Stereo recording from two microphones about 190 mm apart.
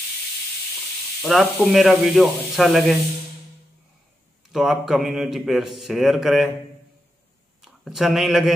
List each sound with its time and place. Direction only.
1.2 s a man's voice: centre (ahead or behind)
4.5 s a man's voice: centre (ahead or behind)
7.6 s speech: centre (ahead or behind)